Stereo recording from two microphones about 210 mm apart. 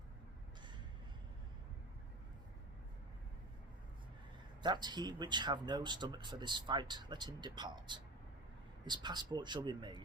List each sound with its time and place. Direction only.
4.6 s speech: 20° right (ahead or behind)